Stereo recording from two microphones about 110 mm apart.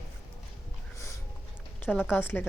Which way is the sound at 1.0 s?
25° left (ahead or behind).